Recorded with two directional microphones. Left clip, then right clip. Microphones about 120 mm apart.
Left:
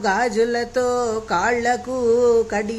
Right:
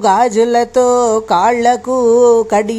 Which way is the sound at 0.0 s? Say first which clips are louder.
Right 8 dB; 45° right (ahead or behind).